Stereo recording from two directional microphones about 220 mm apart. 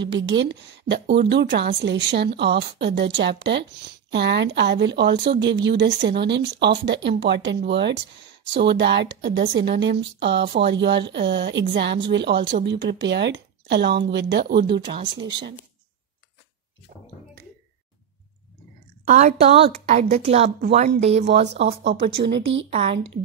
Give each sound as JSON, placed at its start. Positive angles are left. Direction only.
{"t": 0.0, "sound": "speech", "side_deg": -55}
{"t": 14.7, "sound": "a woman's voice", "side_deg": -25}
{"t": 19.0, "sound": "a woman's voice", "side_deg": -30}
{"t": 21.3, "sound": "speech", "side_deg": -50}
{"t": 22.2, "sound": "a woman's voice", "side_deg": -35}